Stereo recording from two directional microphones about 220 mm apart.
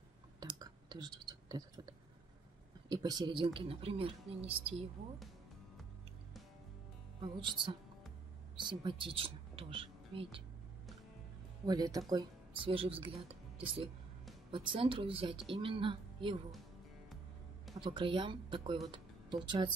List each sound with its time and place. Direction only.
0.4 s clicking: 20° right (ahead or behind)
2.9 s speech: 20° right (ahead or behind)
7.2 s speech: 20° right (ahead or behind)
11.6 s a woman's voice: 15° right (ahead or behind)
17.7 s speech: 20° right (ahead or behind)